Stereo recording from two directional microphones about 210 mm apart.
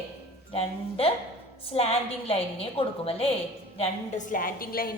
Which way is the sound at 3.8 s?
35° left (ahead or behind).